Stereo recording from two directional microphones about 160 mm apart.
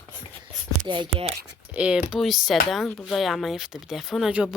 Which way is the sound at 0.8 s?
30° right (ahead or behind).